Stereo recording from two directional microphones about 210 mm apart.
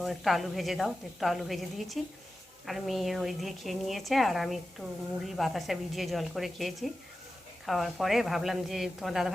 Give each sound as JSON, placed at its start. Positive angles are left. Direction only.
{"t": 0.0, "sound": "a woman's voice", "side_deg": 0}